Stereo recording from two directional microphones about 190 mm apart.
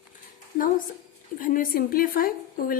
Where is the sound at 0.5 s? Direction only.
45° left (ahead or behind).